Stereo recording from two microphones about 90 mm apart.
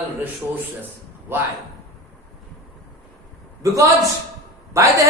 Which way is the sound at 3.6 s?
35° right (ahead or behind).